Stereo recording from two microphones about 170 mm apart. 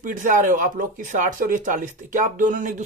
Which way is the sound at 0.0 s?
50° right (ahead or behind).